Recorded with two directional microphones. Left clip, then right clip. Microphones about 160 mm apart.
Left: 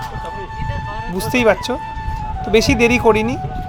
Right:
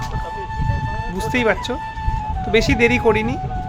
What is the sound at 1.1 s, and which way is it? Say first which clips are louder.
Speech: left 4 dB; 20° left (ahead or behind).